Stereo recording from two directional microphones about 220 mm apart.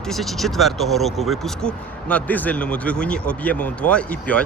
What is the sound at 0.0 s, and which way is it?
Speech, centre (ahead or behind).